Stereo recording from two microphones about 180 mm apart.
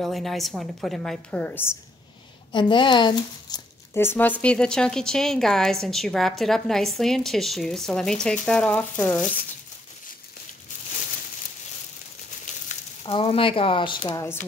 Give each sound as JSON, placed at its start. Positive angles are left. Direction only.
{"t": 0.0, "sound": "speech", "side_deg": 0}
{"t": 2.5, "sound": "speech", "side_deg": 25}
{"t": 12.5, "sound": "frying", "side_deg": 45}
{"t": 13.0, "sound": "speech", "side_deg": 30}